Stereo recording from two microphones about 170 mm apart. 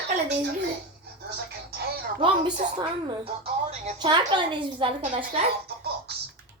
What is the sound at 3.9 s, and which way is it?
A woman's voice, 25° right (ahead or behind).